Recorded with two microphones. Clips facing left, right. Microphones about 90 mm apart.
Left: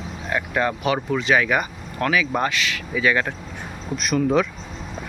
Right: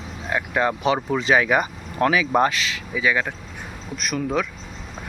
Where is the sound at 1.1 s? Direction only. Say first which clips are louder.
Even; 25° right (ahead or behind).